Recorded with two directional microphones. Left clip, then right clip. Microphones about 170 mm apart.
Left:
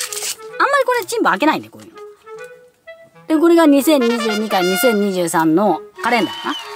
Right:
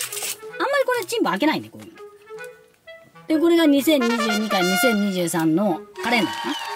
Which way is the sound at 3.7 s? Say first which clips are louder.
Left 5 dB; 5° right (ahead or behind).